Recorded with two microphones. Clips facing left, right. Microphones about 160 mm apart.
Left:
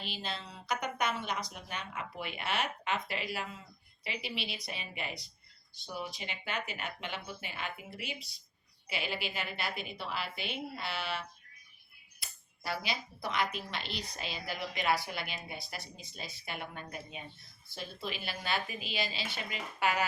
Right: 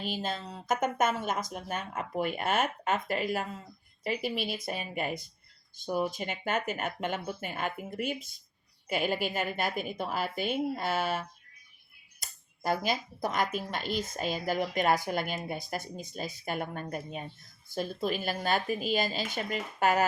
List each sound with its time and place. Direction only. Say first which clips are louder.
0.0 s speech: right 7 dB; 45° right (ahead or behind)